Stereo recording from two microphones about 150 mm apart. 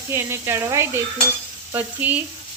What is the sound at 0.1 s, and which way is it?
Sizzle, 15° right (ahead or behind).